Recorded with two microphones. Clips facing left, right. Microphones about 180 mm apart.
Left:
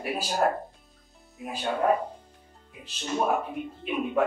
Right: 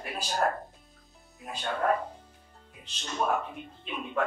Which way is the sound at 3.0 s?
15° left (ahead or behind).